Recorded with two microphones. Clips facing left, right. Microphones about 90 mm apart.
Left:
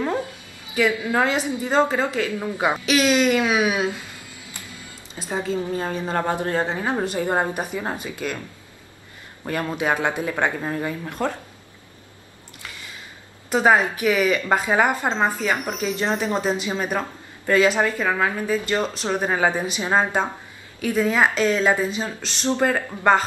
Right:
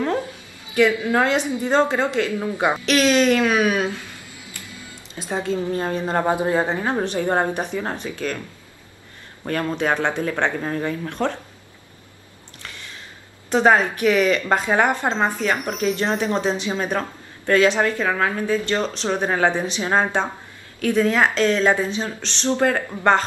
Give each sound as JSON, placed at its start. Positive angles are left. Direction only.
{"t": 0.7, "sound": "speech", "side_deg": 5}
{"t": 2.8, "sound": "speech", "side_deg": 5}
{"t": 4.6, "sound": "music", "side_deg": 20}
{"t": 5.2, "sound": "speech", "side_deg": 0}
{"t": 6.2, "sound": "a man's voice", "side_deg": -10}
{"t": 6.9, "sound": "speech", "side_deg": 5}
{"t": 9.5, "sound": "speech", "side_deg": 10}
{"t": 13.5, "sound": "speech", "side_deg": 5}